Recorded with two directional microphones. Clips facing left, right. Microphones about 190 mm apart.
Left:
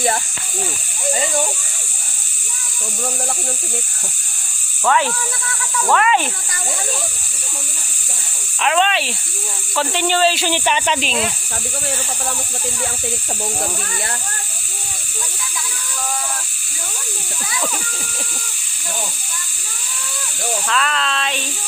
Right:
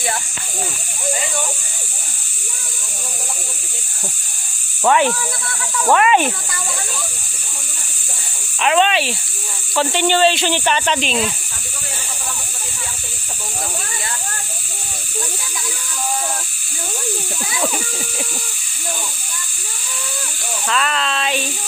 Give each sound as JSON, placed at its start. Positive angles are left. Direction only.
{"t": 4.8, "sound": "speech", "side_deg": -20}
{"t": 8.6, "sound": "speech", "side_deg": 0}
{"t": 20.7, "sound": "speech", "side_deg": 0}